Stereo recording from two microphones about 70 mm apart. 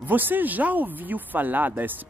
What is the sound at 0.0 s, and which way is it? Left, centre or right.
Speech, right.